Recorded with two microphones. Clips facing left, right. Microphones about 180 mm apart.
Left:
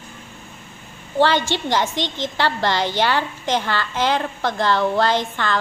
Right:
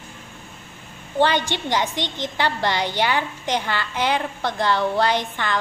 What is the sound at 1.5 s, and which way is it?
A woman's voice, 15° right (ahead or behind).